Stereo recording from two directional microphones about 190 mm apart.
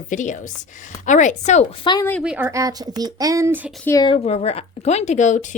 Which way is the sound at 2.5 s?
15° right (ahead or behind).